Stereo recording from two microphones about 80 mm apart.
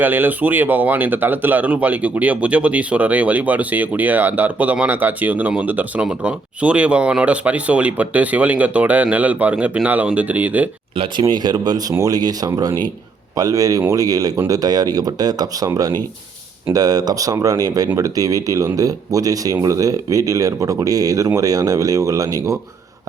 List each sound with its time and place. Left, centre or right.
0.0 s speech: right
11.2 s speech: right